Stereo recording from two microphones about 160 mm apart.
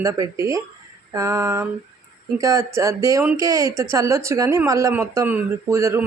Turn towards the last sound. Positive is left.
turn(degrees=-20)  # may be behind; listen again after turning